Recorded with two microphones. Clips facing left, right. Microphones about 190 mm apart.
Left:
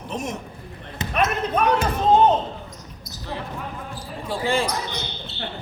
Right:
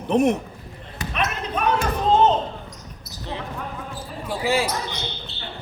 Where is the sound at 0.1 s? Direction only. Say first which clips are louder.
Right 12 dB; 60° right (ahead or behind).